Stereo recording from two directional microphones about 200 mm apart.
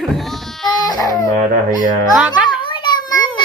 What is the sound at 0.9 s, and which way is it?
Speech, 20° left (ahead or behind).